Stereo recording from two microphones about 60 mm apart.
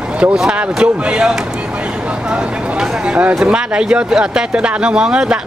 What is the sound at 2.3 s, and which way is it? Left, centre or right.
Speech, centre.